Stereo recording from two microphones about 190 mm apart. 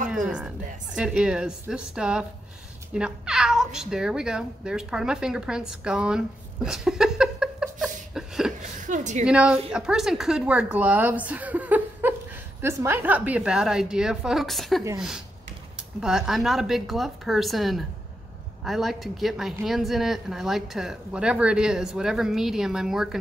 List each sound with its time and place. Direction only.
0.1 s a woman's voice: 5° right (ahead or behind)
8.8 s a woman's voice: 40° right (ahead or behind)
9.2 s speech: 5° right (ahead or behind)